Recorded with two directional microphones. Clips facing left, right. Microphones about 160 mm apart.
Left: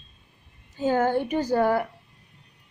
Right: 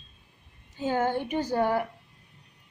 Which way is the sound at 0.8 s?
45° left (ahead or behind).